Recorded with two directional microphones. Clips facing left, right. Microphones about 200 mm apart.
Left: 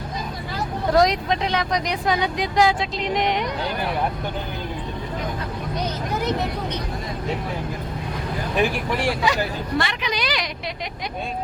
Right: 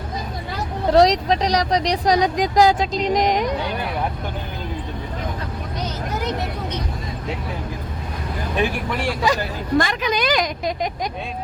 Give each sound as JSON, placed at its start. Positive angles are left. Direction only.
{"t": 0.9, "sound": "speech", "side_deg": -35}
{"t": 9.2, "sound": "speech", "side_deg": -45}